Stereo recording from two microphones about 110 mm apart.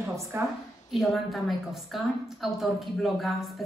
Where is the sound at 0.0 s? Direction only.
20° right (ahead or behind).